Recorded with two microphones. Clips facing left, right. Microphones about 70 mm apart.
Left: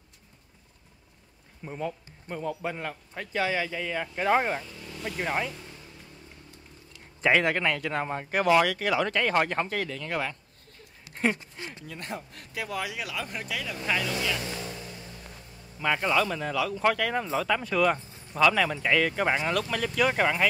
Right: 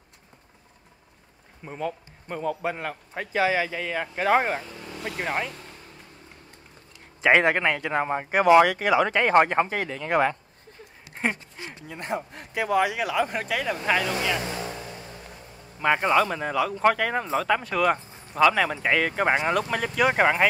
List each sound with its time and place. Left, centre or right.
2.8 s speech: centre
5.0 s speech: centre
7.2 s speech: right
11.1 s speech: centre; by 13.7 s right
13.8 s vehicle: right
15.8 s speech: right